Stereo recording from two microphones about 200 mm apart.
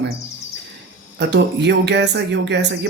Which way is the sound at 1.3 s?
60° right (ahead or behind).